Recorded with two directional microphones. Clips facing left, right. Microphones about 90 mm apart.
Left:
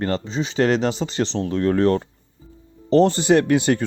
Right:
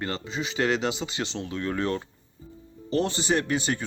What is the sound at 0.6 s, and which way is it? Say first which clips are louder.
Speech: left 6 dB; 40° left (ahead or behind).